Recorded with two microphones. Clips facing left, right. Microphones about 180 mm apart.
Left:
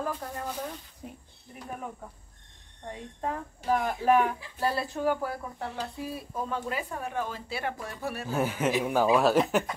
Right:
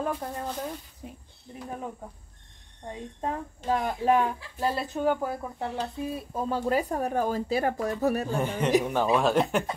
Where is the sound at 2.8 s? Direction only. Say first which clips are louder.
Right 1 dB; 20° right (ahead or behind); by 8.2 s 40° right (ahead or behind).